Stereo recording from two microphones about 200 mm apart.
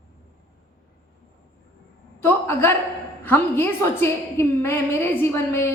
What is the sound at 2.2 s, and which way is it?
A woman's voice, 10° left (ahead or behind).